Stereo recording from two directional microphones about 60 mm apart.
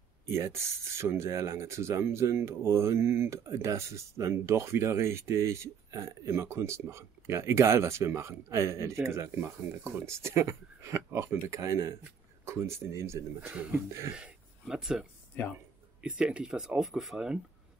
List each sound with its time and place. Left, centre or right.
0.4 s speech: right
13.4 s speech: right
13.7 s cough: right
14.1 s speech: centre